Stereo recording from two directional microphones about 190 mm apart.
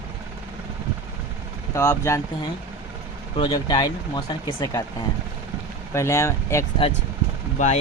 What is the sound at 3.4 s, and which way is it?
Speech, 25° left (ahead or behind).